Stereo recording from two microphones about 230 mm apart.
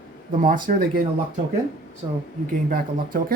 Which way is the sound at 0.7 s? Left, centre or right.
Right.